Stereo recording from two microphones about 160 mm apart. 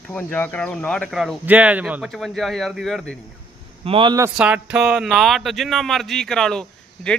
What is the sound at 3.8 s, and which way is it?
Speech, 35° right (ahead or behind).